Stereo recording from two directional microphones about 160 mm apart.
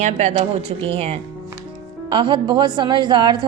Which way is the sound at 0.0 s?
45° right (ahead or behind).